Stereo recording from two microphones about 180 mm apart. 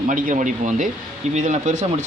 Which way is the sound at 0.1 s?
45° right (ahead or behind).